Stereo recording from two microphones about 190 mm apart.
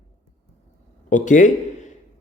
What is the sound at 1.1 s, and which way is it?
Speech, 40° left (ahead or behind).